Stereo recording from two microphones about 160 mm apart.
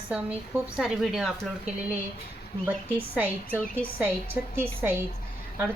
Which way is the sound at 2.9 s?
10° right (ahead or behind).